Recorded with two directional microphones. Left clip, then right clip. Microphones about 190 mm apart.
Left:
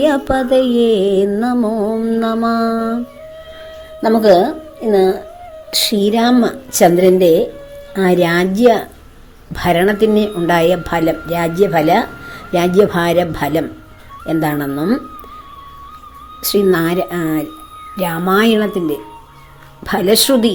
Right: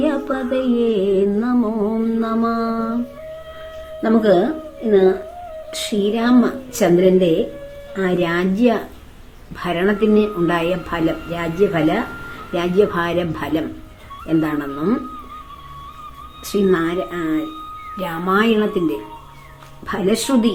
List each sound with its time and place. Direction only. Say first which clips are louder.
0.0 s a woman's voice: left 6 dB; 40° left (ahead or behind)
4.0 s a woman's voice: left 5 dB; 40° left (ahead or behind)
16.4 s a woman's voice: left 4 dB; 40° left (ahead or behind)